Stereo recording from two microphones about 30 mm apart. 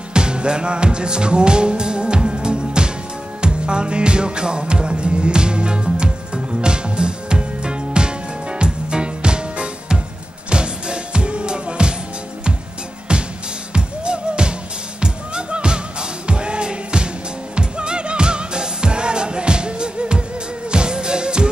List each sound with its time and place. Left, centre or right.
0.1 s music: right
13.1 s music: right